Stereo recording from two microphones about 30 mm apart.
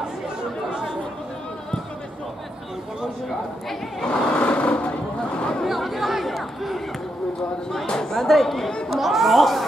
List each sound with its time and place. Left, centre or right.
4.4 s vehicle: left
5.7 s chatter: centre
7.8 s chatter: left
8.3 s speech: centre